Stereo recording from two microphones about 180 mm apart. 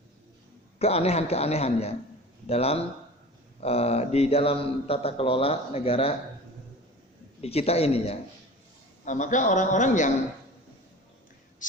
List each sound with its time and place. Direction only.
0.8 s speech: 35° left (ahead or behind)
7.4 s a man's voice: 35° left (ahead or behind)